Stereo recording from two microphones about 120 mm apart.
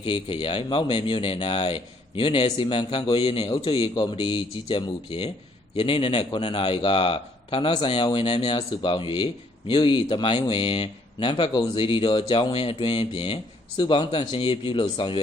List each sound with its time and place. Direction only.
0.0 s speech: 45° left (ahead or behind)
3.4 s a man's voice: 35° left (ahead or behind)
3.7 s speech: 45° left (ahead or behind)